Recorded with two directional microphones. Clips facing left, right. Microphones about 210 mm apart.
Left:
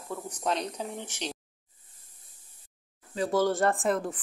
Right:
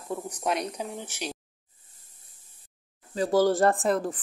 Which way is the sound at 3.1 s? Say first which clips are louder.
Right 4 dB; 35° right (ahead or behind).